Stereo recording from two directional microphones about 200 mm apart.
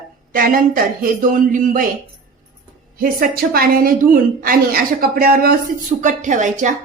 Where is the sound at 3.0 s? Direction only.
45° right (ahead or behind).